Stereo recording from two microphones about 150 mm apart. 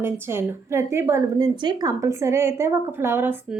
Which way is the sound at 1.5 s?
25° right (ahead or behind).